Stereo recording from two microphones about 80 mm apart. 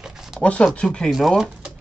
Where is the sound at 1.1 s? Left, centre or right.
Centre.